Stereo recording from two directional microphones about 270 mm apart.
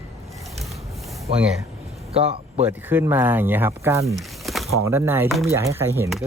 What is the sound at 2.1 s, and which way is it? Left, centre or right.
Speech, right.